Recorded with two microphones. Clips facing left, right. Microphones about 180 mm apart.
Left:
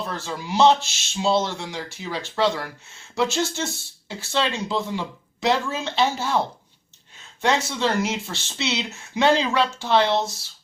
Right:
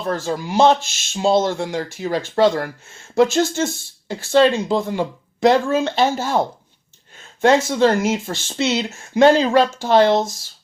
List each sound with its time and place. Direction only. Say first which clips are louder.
0.0 s speech: right 8 dB; 45° right (ahead or behind)